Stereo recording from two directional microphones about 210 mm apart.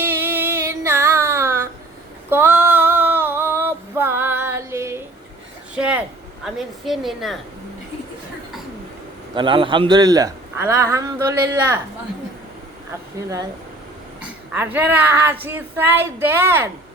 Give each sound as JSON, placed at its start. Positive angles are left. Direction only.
{"t": 0.0, "sound": "a sound", "side_deg": -10}
{"t": 2.3, "sound": "female singing", "side_deg": -10}
{"t": 5.7, "sound": "a sound", "side_deg": -5}
{"t": 6.4, "sound": "a woman's voice", "side_deg": 0}
{"t": 9.3, "sound": "speech", "side_deg": -25}
{"t": 13.1, "sound": "speech", "side_deg": -15}